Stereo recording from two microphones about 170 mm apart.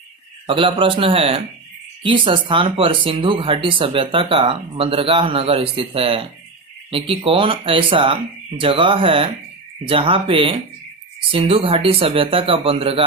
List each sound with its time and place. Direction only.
0.4 s speech: 30° right (ahead or behind)